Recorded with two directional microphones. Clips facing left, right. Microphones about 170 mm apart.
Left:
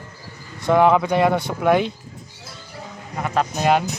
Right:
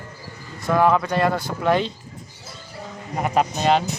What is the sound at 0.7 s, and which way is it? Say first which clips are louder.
Speech: left 3 dB; 20° left (ahead or behind).